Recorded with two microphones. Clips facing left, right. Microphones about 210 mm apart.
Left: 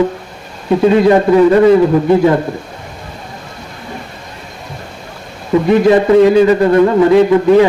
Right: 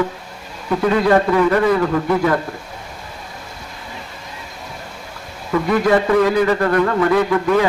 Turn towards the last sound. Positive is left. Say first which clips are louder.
# left 8 dB
turn(degrees=25)  # may be behind; listen again after turning